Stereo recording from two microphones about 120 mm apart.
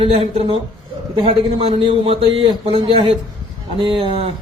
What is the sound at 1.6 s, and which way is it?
Speech, 55° right (ahead or behind).